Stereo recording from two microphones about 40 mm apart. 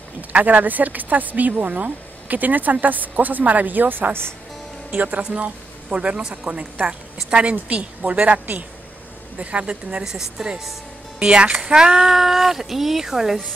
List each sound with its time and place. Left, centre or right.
0.3 s a woman's voice: right
10.0 s speech: centre